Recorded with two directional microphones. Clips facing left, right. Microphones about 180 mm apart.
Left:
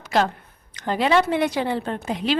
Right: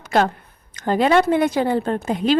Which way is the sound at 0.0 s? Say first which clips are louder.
Right 3 dB; 50° right (ahead or behind).